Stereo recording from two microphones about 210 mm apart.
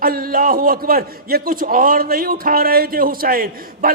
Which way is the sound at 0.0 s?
45° right (ahead or behind).